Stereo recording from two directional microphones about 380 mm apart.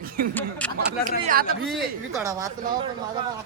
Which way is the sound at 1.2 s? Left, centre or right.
Right.